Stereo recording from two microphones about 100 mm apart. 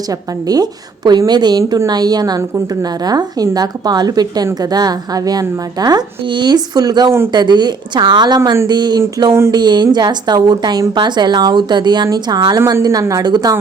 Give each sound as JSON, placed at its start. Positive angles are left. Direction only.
{"t": 0.1, "sound": "a woman's voice", "side_deg": -40}